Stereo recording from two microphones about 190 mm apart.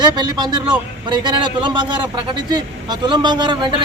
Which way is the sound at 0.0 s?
20° right (ahead or behind).